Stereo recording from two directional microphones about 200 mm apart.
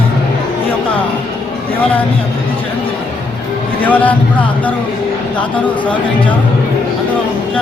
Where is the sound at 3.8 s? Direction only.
10° left (ahead or behind).